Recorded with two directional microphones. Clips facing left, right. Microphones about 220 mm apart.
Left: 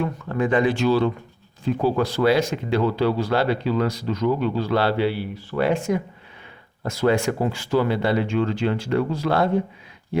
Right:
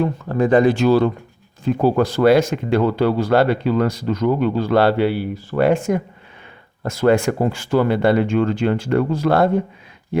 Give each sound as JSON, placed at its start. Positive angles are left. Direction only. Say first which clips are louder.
{"t": 0.0, "sound": "speech", "louder": "right 5 dB", "side_deg": -35}